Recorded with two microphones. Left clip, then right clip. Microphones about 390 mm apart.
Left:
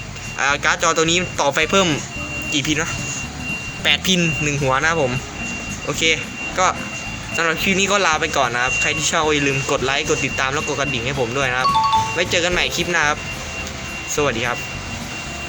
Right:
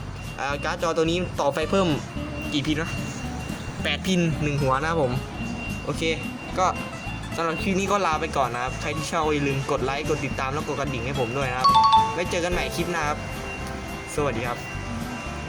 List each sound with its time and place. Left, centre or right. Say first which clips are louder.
0.3 s speech: left 9 dB; right
3.8 s speech: left 9 dB; right
6.6 s speech: left 5 dB; right
11.6 s speech: right 2 dB; centre
12.1 s speech: left 7 dB; right
14.2 s speech: left 6 dB; right